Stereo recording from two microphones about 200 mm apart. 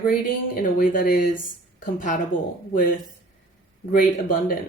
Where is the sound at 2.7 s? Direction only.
45° left (ahead or behind).